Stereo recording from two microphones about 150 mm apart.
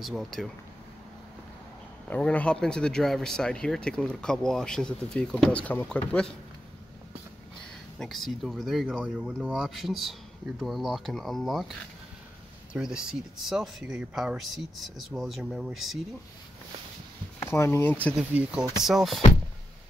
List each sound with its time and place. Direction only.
0.0 s speech: centre (ahead or behind)
2.0 s speech: 10° left (ahead or behind)
8.0 s speech: centre (ahead or behind)
12.7 s speech: 5° right (ahead or behind)
17.4 s speech: 15° left (ahead or behind)
18.1 s speech: 5° right (ahead or behind)